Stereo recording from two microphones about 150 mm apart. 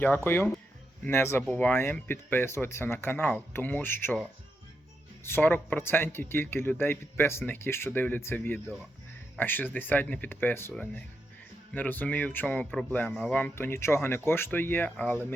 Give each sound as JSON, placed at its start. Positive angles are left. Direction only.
{"t": 0.3, "sound": "speech", "side_deg": 15}
{"t": 5.2, "sound": "speech", "side_deg": 15}